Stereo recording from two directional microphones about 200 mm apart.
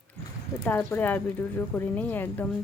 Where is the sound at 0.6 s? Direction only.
10° left (ahead or behind).